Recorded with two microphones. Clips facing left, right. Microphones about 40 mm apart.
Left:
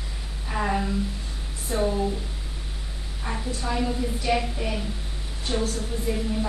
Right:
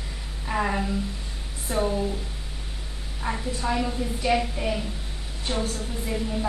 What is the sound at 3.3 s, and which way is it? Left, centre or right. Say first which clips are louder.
A woman's voice: right 2 dB; centre.